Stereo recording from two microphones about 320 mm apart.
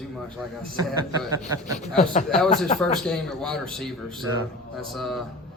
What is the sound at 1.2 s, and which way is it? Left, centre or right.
Speech, centre.